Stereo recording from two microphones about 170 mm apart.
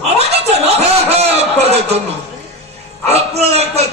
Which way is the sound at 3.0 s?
40° right (ahead or behind).